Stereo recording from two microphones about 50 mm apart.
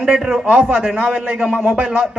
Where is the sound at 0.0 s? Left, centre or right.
Centre.